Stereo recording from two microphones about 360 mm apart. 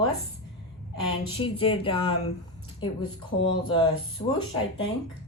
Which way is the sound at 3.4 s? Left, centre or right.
Centre.